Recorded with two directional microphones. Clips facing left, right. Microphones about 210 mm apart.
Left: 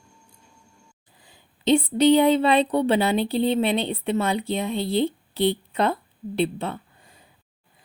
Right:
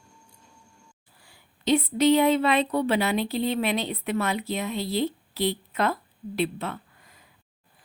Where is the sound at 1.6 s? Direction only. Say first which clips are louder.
Left 3 dB; 30° left (ahead or behind).